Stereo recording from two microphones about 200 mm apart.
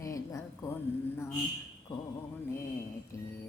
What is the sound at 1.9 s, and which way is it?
Music, 20° left (ahead or behind).